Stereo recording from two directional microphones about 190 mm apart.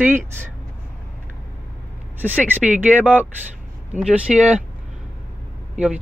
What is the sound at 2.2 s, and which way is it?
Speech, 10° right (ahead or behind).